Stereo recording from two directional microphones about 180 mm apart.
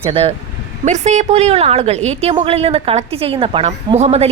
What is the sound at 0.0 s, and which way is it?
A woman's voice, 30° right (ahead or behind).